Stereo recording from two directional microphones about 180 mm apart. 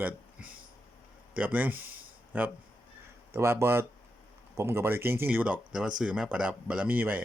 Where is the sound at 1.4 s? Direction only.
10° right (ahead or behind).